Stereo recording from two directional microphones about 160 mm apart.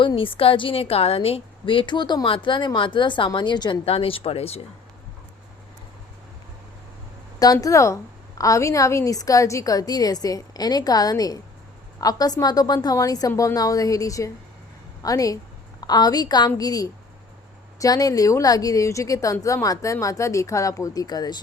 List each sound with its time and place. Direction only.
0.0 s a woman's voice: 30° left (ahead or behind)
7.3 s a woman's voice: 25° left (ahead or behind)